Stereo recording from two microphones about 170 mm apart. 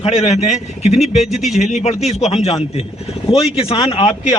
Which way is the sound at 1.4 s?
Centre (ahead or behind).